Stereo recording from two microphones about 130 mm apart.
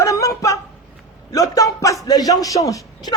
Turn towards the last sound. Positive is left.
turn(degrees=25)  # may be behind; listen again after turning